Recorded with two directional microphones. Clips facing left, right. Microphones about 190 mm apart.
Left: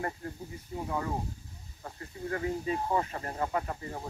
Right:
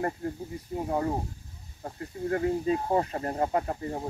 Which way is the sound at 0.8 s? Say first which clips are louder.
Right 5 dB; 35° right (ahead or behind).